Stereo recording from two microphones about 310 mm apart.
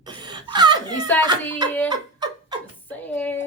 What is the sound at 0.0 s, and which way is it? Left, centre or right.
Laughter, centre.